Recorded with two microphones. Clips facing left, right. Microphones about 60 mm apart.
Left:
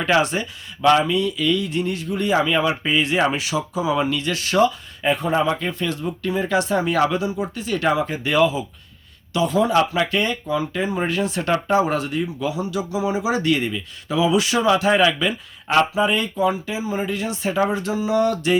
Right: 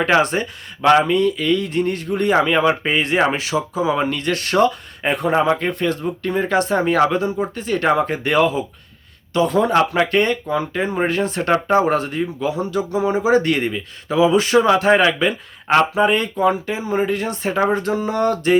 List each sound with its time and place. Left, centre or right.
0.0 s speech: right
10.8 s speech: right